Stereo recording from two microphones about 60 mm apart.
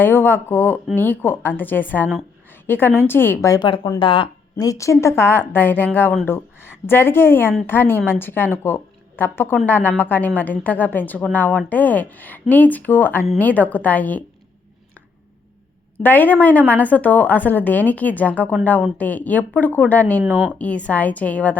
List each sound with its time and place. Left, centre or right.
0.0 s a woman's voice: left
3.4 s a woman's voice: left
16.0 s a woman's voice: left
20.2 s speech: right
20.5 s a woman's voice: left